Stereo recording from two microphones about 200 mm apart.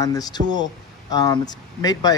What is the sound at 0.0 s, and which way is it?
A man's voice, 20° left (ahead or behind).